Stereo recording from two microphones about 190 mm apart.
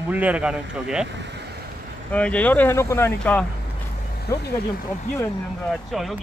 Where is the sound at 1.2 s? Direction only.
65° right (ahead or behind).